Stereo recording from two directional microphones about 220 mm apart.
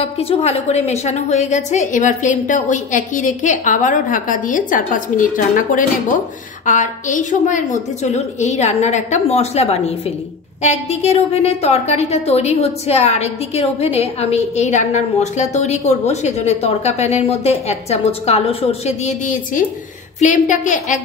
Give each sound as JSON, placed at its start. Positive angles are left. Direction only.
{"t": 0.0, "sound": "a woman's voice", "side_deg": 25}